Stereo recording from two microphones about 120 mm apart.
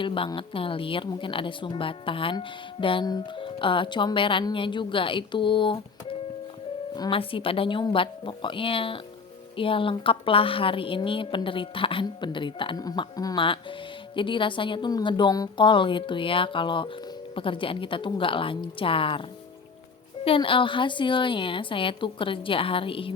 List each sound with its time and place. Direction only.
0.0 s a woman's voice: 45° left (ahead or behind)
20.2 s a woman's voice: 50° left (ahead or behind)